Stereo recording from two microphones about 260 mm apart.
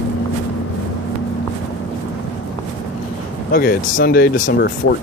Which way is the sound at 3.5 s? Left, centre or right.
Left.